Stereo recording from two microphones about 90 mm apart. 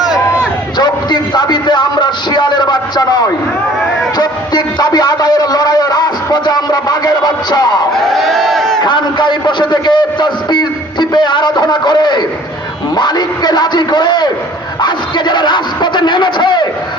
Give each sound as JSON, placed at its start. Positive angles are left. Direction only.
{"t": 0.8, "sound": "a sound", "side_deg": 55}
{"t": 4.2, "sound": "a man's voice", "side_deg": 50}
{"t": 7.9, "sound": "speech", "side_deg": 0}
{"t": 8.8, "sound": "a man's voice", "side_deg": 55}